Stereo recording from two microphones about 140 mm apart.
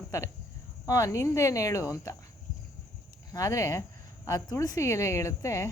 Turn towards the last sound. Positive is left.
turn(degrees=20)  # may be behind; listen again after turning